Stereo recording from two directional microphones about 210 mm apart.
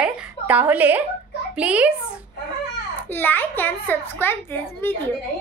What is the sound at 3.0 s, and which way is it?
A child's voice, 10° left (ahead or behind).